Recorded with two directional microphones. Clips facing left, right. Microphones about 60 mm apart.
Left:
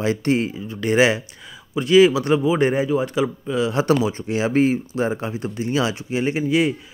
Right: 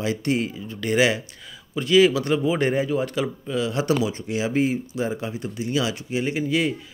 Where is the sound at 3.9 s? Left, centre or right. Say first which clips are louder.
Left 3 dB; left.